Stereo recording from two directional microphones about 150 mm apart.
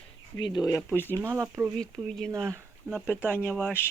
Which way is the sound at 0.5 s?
25° left (ahead or behind).